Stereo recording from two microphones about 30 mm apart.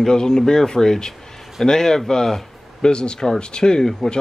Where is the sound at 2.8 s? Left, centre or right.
Left.